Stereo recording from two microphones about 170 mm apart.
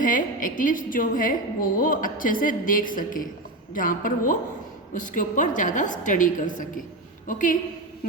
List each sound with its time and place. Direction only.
0.0 s a woman's voice: 50° left (ahead or behind)